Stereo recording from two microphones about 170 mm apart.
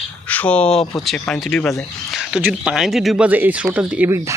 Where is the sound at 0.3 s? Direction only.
10° left (ahead or behind).